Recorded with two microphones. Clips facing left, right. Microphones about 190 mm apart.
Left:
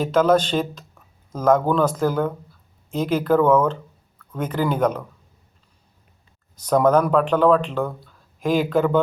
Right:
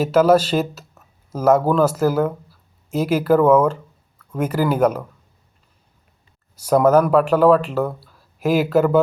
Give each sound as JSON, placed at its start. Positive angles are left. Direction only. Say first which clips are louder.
{"t": 0.0, "sound": "speech", "louder": "right 3 dB", "side_deg": -5}
{"t": 6.6, "sound": "speech", "louder": "right 3 dB", "side_deg": -5}